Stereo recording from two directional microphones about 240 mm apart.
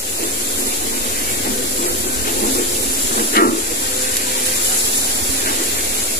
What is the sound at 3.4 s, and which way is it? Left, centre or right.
Steam, left.